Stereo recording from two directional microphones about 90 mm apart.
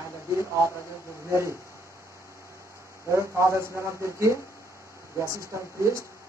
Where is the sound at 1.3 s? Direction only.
30° right (ahead or behind).